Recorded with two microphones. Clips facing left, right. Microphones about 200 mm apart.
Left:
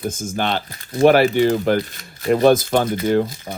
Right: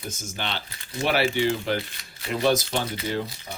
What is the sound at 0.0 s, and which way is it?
Speech, 50° left (ahead or behind).